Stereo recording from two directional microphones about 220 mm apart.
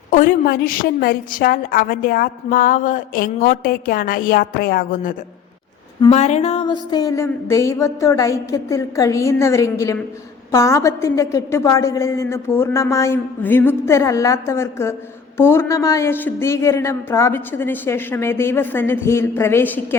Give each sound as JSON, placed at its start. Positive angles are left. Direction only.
{"t": 0.1, "sound": "a woman's voice", "side_deg": 40}